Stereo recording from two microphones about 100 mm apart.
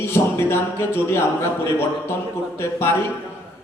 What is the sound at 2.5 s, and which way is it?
Speech, 25° left (ahead or behind).